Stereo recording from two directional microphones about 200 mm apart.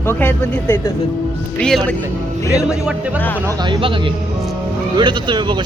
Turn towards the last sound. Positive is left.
turn(degrees=-25)  # may be behind; listen again after turning